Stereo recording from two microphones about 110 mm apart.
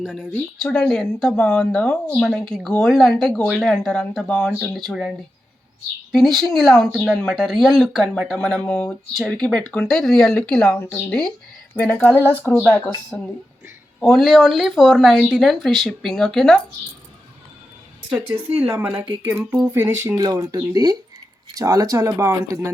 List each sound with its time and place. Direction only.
0.0 s speech: centre (ahead or behind)
13.1 s speech: 5° left (ahead or behind)
18.9 s speech: 15° right (ahead or behind)